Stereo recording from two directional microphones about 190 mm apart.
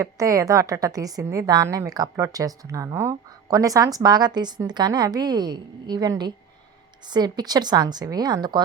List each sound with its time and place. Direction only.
0.0 s a woman's voice: 15° right (ahead or behind)